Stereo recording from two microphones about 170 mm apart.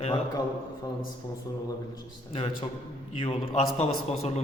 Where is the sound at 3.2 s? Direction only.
30° left (ahead or behind).